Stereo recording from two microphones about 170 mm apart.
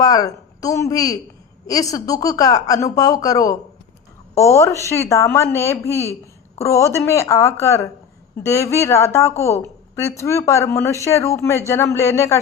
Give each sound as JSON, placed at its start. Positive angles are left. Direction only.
{"t": 0.0, "sound": "a woman's voice", "side_deg": 20}